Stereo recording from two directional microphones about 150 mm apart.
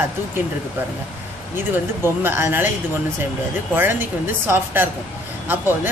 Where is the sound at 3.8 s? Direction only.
15° right (ahead or behind).